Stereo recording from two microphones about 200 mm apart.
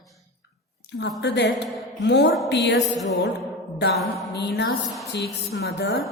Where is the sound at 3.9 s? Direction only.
Centre (ahead or behind).